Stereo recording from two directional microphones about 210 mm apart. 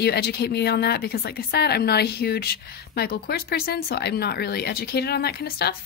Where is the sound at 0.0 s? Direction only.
50° left (ahead or behind).